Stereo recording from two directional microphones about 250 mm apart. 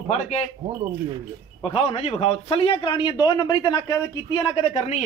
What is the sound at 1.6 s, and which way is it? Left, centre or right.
A man's voice, left.